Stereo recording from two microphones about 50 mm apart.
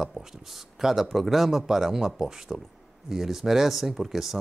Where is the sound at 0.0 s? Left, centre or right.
Centre.